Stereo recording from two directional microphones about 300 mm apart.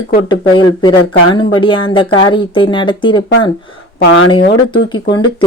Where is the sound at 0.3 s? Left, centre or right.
Centre.